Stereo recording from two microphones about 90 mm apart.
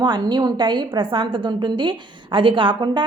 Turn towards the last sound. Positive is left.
turn(degrees=-65)  # may be behind; listen again after turning